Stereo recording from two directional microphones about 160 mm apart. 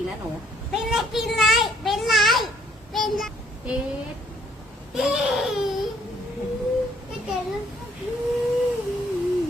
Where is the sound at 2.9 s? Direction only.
Centre (ahead or behind).